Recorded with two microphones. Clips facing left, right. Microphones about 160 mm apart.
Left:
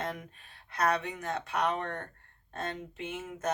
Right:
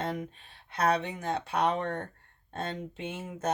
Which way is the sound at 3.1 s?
30° right (ahead or behind).